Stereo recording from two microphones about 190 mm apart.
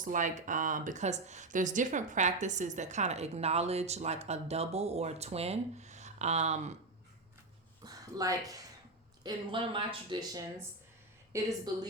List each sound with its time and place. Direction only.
0.0 s speech: 40° right (ahead or behind)
7.9 s a woman's voice: 20° right (ahead or behind)